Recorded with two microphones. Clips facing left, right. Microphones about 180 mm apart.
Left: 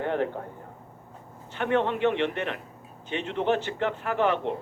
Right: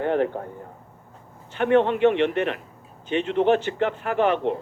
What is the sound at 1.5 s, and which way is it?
Speech, 65° right (ahead or behind).